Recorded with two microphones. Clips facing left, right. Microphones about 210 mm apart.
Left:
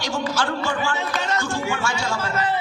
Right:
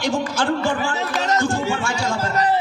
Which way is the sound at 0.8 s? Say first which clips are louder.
Right 2 dB; 35° right (ahead or behind).